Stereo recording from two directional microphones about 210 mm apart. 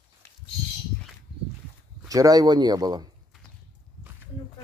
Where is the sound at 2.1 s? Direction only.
15° right (ahead or behind).